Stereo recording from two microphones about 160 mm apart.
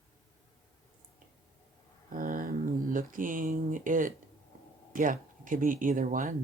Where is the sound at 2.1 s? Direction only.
60° right (ahead or behind).